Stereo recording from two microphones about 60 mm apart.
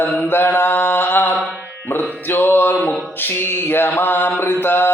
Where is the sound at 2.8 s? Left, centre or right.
Centre.